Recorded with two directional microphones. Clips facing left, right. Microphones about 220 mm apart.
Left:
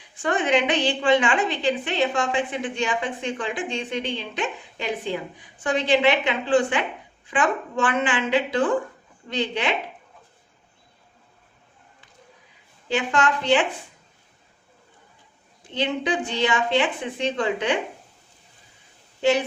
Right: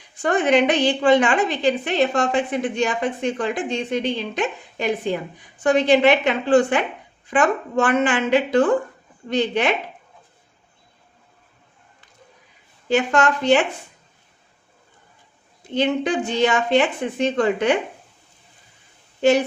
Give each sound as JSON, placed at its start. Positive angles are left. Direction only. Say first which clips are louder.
{"t": 0.2, "sound": "a woman's voice", "louder": "right 4 dB", "side_deg": -40}
{"t": 12.9, "sound": "a woman's voice", "louder": "right 4 dB", "side_deg": -45}
{"t": 15.7, "sound": "a woman's voice", "louder": "right 4 dB", "side_deg": -45}